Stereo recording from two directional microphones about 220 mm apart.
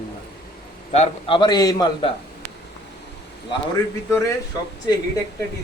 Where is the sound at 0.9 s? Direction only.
25° left (ahead or behind).